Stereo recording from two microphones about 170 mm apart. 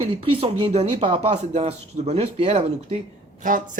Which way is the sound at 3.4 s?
50° right (ahead or behind).